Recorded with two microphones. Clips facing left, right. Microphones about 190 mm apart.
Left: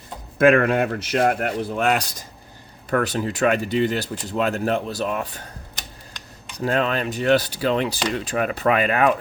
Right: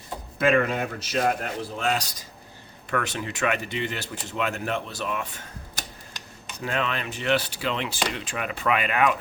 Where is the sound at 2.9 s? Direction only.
40° left (ahead or behind).